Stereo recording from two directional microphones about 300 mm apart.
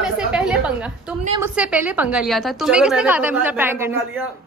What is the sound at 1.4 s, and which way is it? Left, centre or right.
A woman's voice, centre.